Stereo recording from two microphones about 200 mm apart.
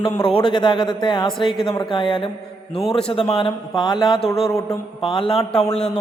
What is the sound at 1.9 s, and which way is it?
Speech, 25° left (ahead or behind).